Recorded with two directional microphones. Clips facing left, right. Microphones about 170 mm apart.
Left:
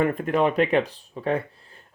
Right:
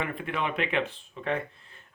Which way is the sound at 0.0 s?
45° left (ahead or behind).